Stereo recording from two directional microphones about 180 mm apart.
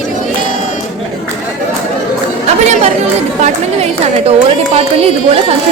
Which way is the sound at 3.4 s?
35° right (ahead or behind).